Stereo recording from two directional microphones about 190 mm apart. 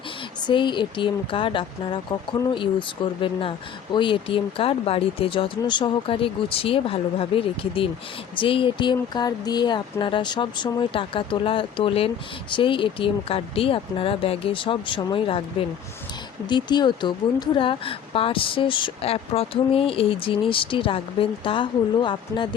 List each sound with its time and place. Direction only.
0.4 s speech: 25° left (ahead or behind)